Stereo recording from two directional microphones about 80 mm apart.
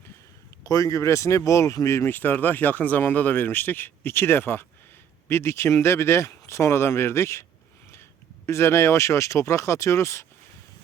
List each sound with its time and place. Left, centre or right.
0.6 s speech: left
2.1 s speech: left
8.4 s speech: left